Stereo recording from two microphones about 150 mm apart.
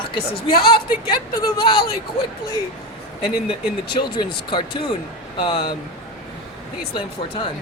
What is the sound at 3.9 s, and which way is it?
A woman's voice, 30° left (ahead or behind).